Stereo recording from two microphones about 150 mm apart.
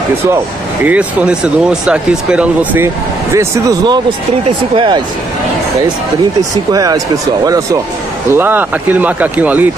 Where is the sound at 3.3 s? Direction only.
20° right (ahead or behind).